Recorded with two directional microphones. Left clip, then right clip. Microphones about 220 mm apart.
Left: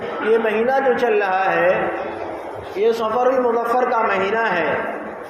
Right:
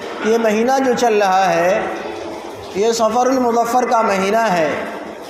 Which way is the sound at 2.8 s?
60° right (ahead or behind).